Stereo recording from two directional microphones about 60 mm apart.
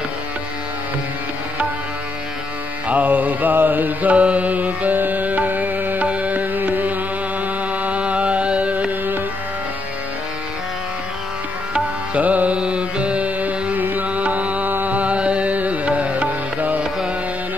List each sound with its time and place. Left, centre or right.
2.9 s mantra: right
7.8 s music: right
11.7 s music: right